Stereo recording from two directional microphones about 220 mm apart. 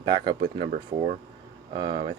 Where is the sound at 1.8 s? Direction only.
20° right (ahead or behind).